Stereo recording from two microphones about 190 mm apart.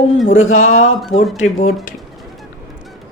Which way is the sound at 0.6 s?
90° left.